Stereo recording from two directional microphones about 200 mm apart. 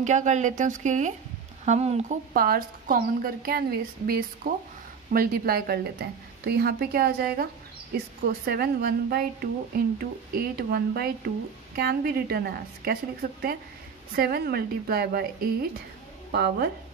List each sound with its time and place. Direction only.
0.0 s speech: 35° right (ahead or behind)
8.5 s speech: 50° right (ahead or behind)
16.3 s speech: 55° right (ahead or behind)